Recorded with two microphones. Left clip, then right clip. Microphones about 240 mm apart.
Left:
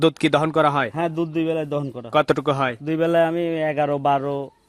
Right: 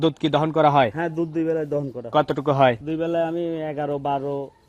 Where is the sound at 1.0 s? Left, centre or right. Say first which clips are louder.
Left 2 dB; left.